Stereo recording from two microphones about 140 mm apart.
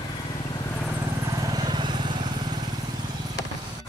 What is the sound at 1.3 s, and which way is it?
Vehicle, 25° right (ahead or behind).